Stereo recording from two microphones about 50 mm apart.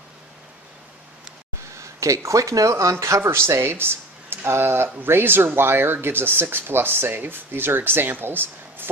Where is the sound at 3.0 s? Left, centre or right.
Right.